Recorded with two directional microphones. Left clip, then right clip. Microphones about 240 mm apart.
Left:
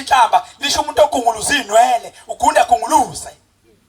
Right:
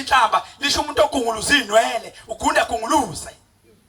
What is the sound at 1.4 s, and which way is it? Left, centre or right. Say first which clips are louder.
A man's voice: left 2 dB; centre.